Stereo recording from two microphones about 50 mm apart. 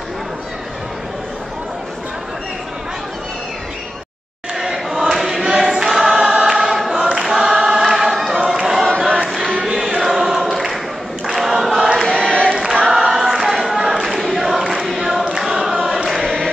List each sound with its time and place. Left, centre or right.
4.6 s choir: centre
5.4 s choir: centre
7.8 s choir: centre
12.2 s choir: centre
12.8 s choir: centre
16.1 s choir: centre